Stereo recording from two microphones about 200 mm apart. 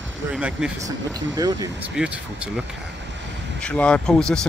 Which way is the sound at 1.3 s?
20° right (ahead or behind).